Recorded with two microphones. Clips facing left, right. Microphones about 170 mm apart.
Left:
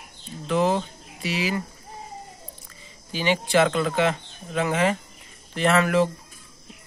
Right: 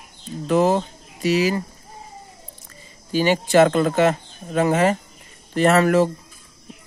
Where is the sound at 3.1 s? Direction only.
45° right (ahead or behind).